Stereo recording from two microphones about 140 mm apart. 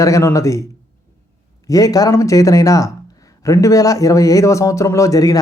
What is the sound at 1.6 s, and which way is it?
A man's voice, 25° left (ahead or behind).